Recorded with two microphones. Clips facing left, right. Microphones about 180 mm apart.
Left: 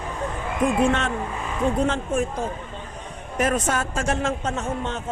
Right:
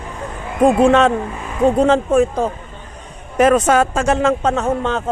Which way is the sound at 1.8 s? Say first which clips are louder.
Right 10 dB; 75° right (ahead or behind).